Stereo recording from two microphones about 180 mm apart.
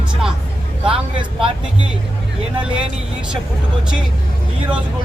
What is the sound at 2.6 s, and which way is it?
Speech, 5° right (ahead or behind).